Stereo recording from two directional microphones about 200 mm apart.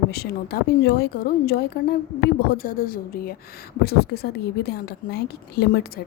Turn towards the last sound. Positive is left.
turn(degrees=55)  # may be behind; listen again after turning